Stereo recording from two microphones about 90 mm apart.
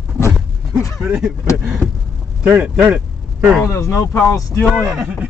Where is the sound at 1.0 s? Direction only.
15° right (ahead or behind).